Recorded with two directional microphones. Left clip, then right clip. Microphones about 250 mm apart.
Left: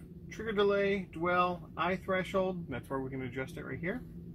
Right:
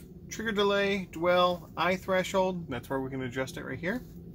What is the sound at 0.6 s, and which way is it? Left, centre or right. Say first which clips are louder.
Speech: right 2 dB; centre.